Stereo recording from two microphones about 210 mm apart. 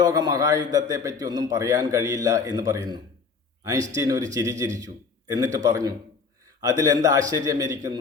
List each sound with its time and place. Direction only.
0.0 s a man's voice: 20° right (ahead or behind)